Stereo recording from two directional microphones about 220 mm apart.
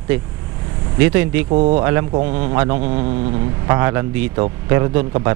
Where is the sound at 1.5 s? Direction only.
30° right (ahead or behind).